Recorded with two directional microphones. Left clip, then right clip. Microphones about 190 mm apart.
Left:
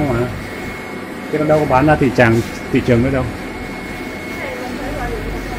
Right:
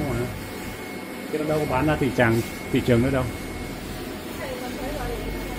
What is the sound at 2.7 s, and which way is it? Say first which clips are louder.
Speech: left 6 dB; centre (ahead or behind).